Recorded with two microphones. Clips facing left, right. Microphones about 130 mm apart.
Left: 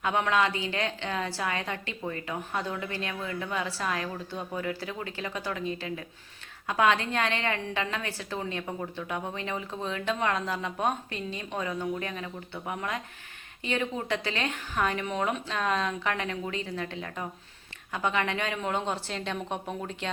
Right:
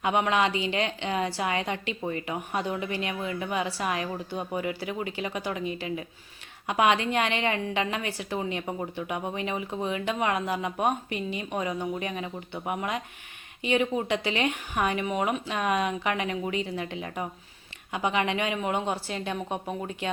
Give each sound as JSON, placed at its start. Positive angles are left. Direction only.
{"t": 0.0, "sound": "a woman's voice", "side_deg": -20}